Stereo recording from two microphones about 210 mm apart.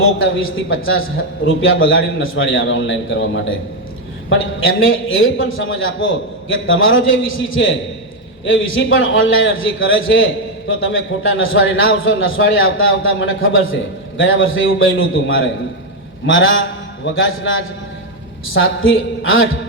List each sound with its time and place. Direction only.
0.0 s a man's voice: 70° left (ahead or behind)